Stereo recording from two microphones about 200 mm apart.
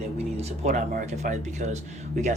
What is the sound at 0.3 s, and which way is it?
Speech, 35° right (ahead or behind).